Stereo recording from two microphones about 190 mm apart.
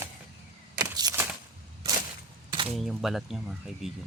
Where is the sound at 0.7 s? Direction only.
20° right (ahead or behind).